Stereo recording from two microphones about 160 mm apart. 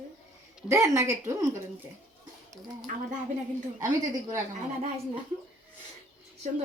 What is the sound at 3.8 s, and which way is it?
Speech, 20° right (ahead or behind).